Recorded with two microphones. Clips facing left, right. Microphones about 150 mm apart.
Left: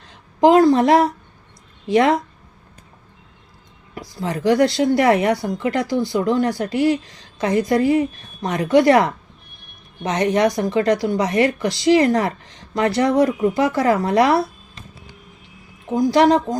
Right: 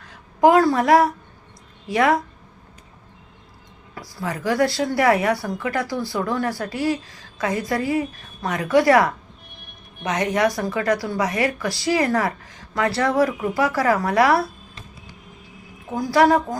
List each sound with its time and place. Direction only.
0.0 s a woman's voice: 25° left (ahead or behind)
3.9 s speech: 20° left (ahead or behind)
15.9 s speech: 20° left (ahead or behind)